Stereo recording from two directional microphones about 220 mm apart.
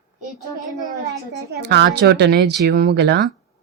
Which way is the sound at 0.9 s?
45° right (ahead or behind).